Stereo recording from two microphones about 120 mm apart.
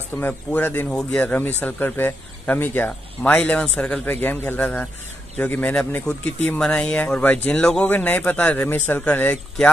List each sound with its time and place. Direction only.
0.2 s speech: 15° left (ahead or behind)